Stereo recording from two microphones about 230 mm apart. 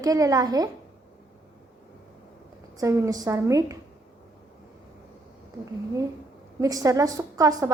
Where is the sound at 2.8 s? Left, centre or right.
Centre.